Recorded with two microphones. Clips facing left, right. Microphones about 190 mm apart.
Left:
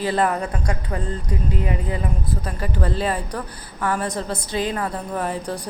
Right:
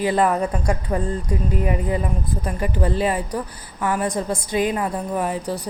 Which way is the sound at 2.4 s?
10° right (ahead or behind).